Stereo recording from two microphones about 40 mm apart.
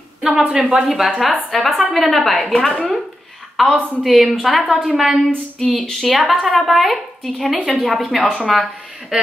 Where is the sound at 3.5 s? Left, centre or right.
Centre.